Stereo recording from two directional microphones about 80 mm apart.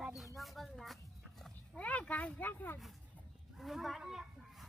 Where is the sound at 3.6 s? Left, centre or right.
Centre.